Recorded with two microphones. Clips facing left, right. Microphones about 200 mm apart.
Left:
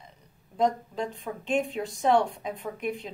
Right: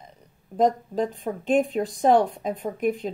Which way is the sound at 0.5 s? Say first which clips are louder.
Right 5 dB; 40° right (ahead or behind).